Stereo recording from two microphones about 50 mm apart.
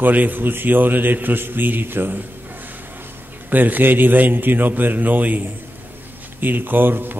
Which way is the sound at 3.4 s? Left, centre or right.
Right.